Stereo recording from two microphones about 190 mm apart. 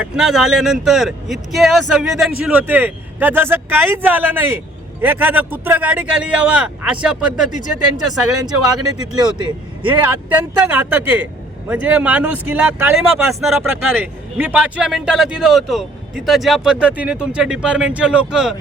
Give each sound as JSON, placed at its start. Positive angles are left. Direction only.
{"t": 0.0, "sound": "speech", "side_deg": 0}
{"t": 7.5, "sound": "speech", "side_deg": 40}
{"t": 8.7, "sound": "speech", "side_deg": -20}
{"t": 9.8, "sound": "speech", "side_deg": -10}